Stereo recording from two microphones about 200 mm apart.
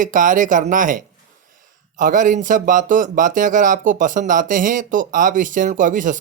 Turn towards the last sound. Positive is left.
turn(degrees=-40)  # may be behind; listen again after turning